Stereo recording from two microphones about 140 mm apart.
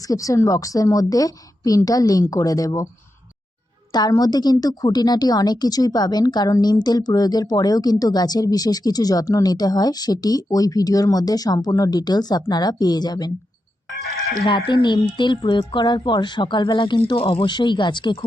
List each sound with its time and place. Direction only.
0.0 s a woman's voice: 25° left (ahead or behind)
3.9 s a woman's voice: 30° left (ahead or behind)
14.4 s speech: 35° left (ahead or behind)